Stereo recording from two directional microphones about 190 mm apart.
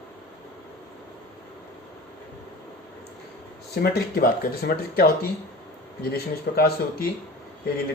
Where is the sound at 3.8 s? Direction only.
55° left (ahead or behind).